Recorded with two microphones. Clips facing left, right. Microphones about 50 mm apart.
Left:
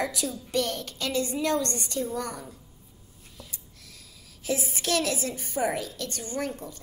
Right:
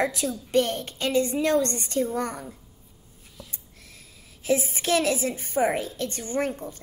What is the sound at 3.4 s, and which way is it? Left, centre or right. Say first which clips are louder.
A woman's voice: right 1 dB; right.